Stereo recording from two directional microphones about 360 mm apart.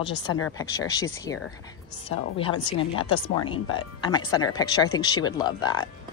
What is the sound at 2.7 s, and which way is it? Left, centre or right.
Speech, centre.